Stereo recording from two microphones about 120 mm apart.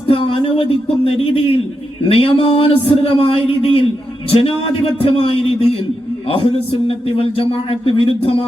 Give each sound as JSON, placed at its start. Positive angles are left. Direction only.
{"t": 0.1, "sound": "a man's voice", "side_deg": 50}
{"t": 4.9, "sound": "a man's voice", "side_deg": 50}